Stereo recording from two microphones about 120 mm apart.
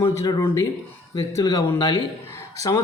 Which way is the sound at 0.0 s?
25° left (ahead or behind).